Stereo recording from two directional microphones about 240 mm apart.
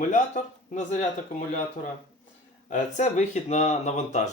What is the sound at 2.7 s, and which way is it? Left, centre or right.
Speech, left.